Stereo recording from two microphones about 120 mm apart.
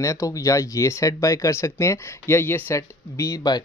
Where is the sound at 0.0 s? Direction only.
25° left (ahead or behind).